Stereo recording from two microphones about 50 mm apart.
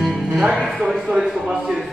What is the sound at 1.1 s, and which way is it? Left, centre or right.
Speech, centre.